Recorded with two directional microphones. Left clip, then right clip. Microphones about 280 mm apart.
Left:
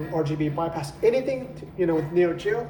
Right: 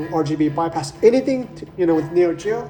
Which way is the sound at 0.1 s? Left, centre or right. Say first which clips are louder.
Right 6 dB; right.